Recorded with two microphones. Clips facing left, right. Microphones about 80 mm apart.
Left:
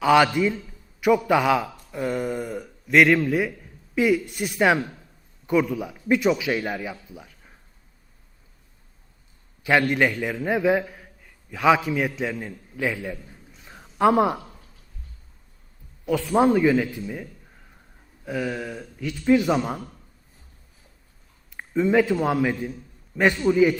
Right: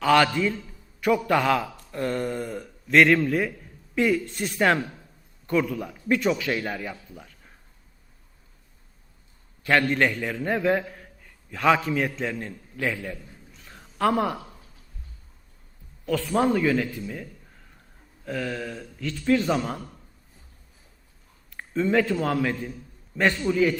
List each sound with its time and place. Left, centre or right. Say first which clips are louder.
0.0 s a man's voice: left 2 dB; centre
9.6 s a man's voice: left 1 dB; centre
16.0 s a man's voice: left 3 dB; centre
18.3 s a man's voice: left 2 dB; centre
21.5 s a sound: left 3 dB; centre
22.2 s a man's voice: left 3 dB; centre